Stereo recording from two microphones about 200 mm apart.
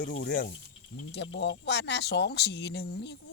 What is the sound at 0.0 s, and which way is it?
Speech, 45° left (ahead or behind).